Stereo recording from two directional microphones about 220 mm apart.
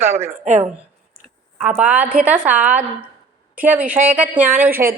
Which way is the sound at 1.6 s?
5° right (ahead or behind).